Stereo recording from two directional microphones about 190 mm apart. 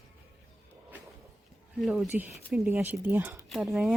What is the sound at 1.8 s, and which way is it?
Speech, 5° right (ahead or behind).